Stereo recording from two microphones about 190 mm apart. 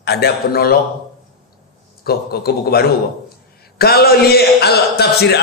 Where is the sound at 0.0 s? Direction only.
60° left (ahead or behind).